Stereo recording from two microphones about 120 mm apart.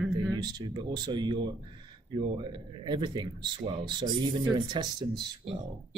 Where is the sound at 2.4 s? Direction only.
40° right (ahead or behind).